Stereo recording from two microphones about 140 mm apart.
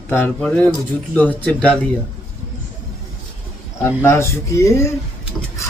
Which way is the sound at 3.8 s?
20° left (ahead or behind).